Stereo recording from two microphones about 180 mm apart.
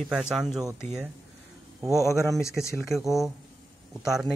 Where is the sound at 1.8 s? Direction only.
20° right (ahead or behind).